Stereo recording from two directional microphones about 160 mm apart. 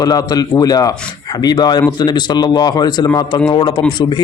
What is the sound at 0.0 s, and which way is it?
Speech, 25° left (ahead or behind).